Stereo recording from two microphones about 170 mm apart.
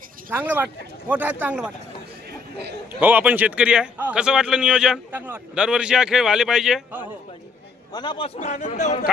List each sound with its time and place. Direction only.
0.3 s speech: 10° right (ahead or behind)
3.0 s a man's voice: 10° right (ahead or behind)
7.9 s a man's voice: 25° left (ahead or behind)
8.4 s speech: 45° left (ahead or behind)